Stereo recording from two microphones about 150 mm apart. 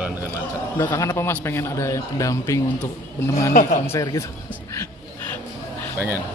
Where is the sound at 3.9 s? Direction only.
20° left (ahead or behind).